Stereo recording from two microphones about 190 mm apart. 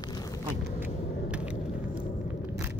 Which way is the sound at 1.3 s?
5° right (ahead or behind).